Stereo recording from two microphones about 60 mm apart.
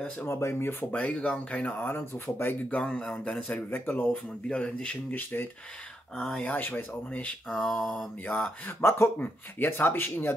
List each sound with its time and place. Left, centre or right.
0.3 s speech: left
0.9 s speech: centre; by 2.5 s left
2.7 s speech: centre
3.4 s speech: left
4.1 s speech: centre
5.1 s speech: left
6.1 s speech: centre
6.4 s speech: left
7.4 s speech: centre
8.3 s speech: left
8.8 s speech: left